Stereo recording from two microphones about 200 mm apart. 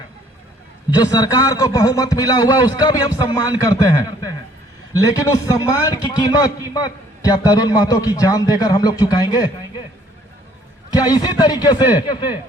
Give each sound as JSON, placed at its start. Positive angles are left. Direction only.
{"t": 0.9, "sound": "a man's voice", "side_deg": 20}
{"t": 10.9, "sound": "a man's voice", "side_deg": 20}